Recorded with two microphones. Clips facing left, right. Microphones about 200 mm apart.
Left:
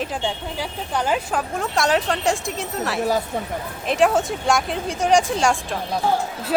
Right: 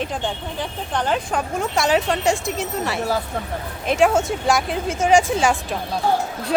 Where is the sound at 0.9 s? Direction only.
5° left (ahead or behind).